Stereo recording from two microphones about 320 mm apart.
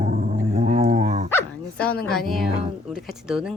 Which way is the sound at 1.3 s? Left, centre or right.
Centre.